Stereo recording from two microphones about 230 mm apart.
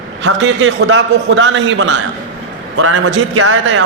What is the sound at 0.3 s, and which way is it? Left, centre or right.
A man's voice, right.